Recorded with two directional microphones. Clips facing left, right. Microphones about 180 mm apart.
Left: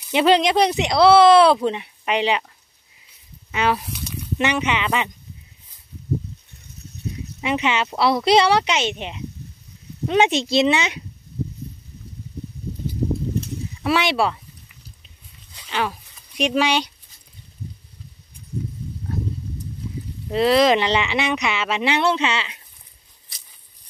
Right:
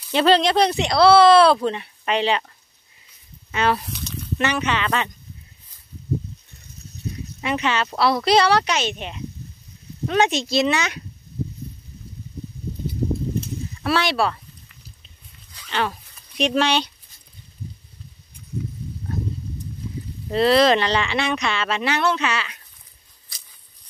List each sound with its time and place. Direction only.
0.0 s speech: 15° left (ahead or behind)
3.5 s speech: 10° left (ahead or behind)
7.4 s speech: 20° left (ahead or behind)
13.8 s speech: 20° left (ahead or behind)
15.7 s speech: 5° left (ahead or behind)
20.2 s speech: 10° left (ahead or behind)